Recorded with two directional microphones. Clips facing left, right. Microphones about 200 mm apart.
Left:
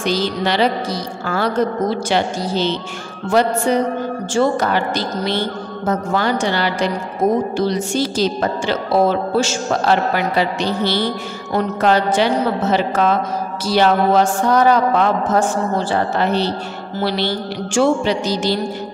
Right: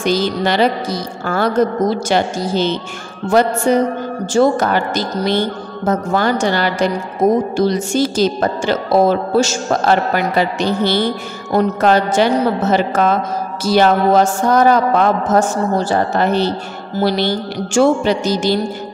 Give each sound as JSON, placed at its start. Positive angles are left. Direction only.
{"t": 0.0, "sound": "speech", "side_deg": -50}